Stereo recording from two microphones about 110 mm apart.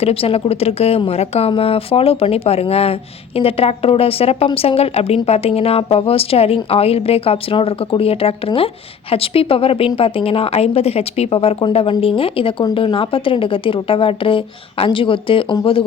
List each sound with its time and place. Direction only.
0.0 s speech: 60° left (ahead or behind)